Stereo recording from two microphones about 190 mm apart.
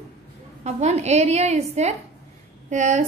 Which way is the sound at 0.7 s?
35° right (ahead or behind).